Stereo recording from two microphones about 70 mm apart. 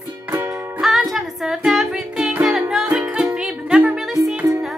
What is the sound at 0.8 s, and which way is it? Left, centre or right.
Music, centre.